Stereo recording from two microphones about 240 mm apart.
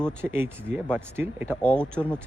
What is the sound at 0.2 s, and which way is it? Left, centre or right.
Speech, centre.